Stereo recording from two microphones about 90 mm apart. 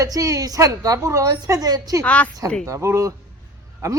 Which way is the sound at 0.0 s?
35° right (ahead or behind).